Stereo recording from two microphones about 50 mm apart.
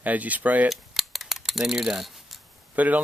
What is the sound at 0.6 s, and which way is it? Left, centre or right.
Coin, centre.